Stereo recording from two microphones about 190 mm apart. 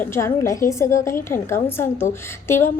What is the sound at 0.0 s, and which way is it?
A woman's voice, 15° left (ahead or behind).